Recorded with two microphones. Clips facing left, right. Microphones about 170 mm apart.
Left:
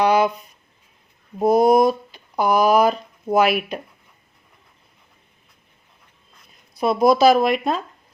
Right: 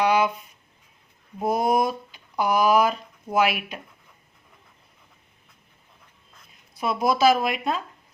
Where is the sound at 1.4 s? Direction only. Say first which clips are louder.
Left 8 dB; 40° left (ahead or behind).